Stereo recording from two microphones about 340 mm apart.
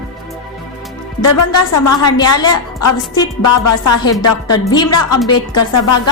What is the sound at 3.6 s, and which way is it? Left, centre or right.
Music, left.